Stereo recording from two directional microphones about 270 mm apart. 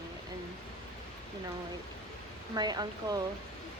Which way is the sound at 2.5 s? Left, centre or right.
Centre.